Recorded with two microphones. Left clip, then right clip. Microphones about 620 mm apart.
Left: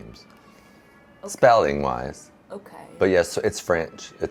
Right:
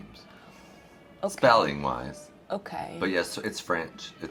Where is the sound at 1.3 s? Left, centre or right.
Left.